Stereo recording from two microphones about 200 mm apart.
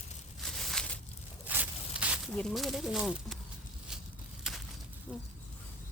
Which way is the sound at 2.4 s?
Centre (ahead or behind).